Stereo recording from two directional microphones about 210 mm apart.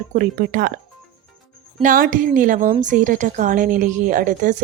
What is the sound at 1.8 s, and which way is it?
A woman's voice, 40° right (ahead or behind).